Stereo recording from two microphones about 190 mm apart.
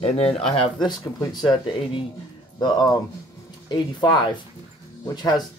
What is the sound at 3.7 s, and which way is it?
Speech, 20° left (ahead or behind).